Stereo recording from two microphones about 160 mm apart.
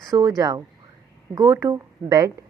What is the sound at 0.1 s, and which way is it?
Speech, 25° right (ahead or behind).